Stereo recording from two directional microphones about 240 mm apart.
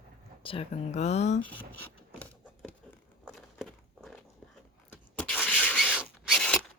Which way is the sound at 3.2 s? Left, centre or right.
Centre.